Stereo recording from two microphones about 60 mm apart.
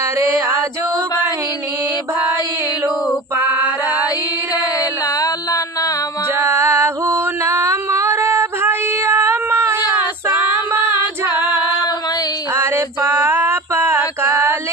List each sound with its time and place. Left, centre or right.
0.0 s a sound: right
3.3 s female singing: right
4.5 s music: left
6.3 s music: right
10.2 s female singing: right
12.5 s a sound: right
14.0 s female singing: right